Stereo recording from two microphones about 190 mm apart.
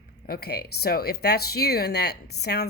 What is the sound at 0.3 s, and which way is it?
Speech, 55° left (ahead or behind).